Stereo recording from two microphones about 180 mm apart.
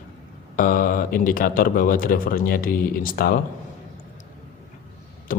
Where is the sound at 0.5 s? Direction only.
50° left (ahead or behind).